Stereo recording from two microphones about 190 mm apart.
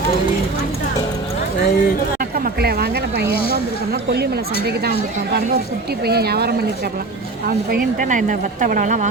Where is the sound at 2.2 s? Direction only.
50° right (ahead or behind).